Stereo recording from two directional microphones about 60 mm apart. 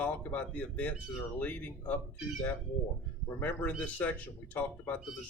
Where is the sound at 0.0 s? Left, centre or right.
Left.